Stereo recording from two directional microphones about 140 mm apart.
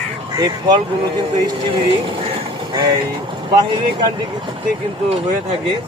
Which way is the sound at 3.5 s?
30° right (ahead or behind).